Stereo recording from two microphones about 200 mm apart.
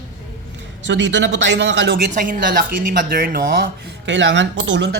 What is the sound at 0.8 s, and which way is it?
Speech, 65° right (ahead or behind).